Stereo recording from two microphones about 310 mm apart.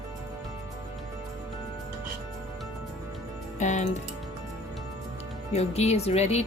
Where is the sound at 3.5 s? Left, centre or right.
Left.